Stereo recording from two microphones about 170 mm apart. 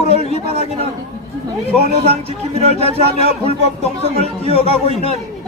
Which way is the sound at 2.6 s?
35° right (ahead or behind).